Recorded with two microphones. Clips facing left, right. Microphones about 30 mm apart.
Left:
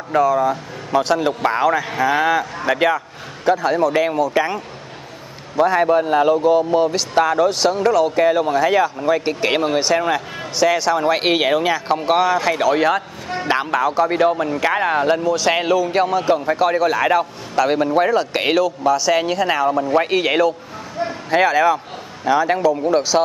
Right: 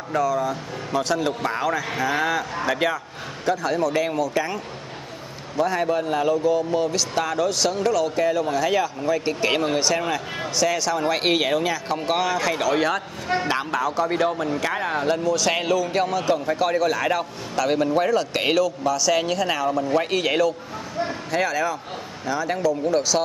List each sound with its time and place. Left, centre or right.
0.1 s a man's voice: left
5.6 s a man's voice: left